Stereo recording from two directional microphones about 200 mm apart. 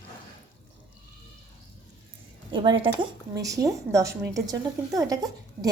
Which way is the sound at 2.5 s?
25° right (ahead or behind).